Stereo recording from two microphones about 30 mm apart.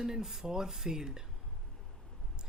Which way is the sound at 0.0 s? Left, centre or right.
Centre.